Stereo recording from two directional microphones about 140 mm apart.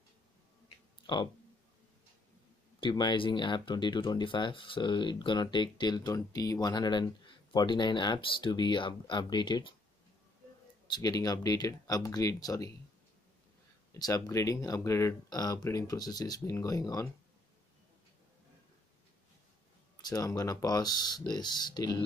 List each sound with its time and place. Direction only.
1.0 s speech: 35° left (ahead or behind)
2.8 s speech: 35° left (ahead or behind)
10.9 s speech: 25° left (ahead or behind)
13.9 s speech: 25° left (ahead or behind)
20.0 s speech: 25° left (ahead or behind)